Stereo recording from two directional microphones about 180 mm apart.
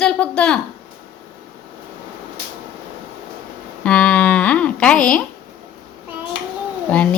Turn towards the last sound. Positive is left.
turn(degrees=5)  # may be behind; listen again after turning